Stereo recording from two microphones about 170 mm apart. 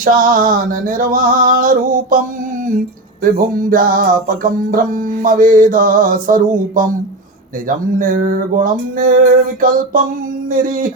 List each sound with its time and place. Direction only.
0.0 s music: 55° right (ahead or behind)
3.2 s music: 55° right (ahead or behind)
7.9 s music: 50° right (ahead or behind)